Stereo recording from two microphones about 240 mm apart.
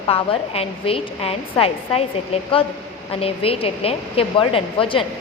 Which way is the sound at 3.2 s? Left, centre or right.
Left.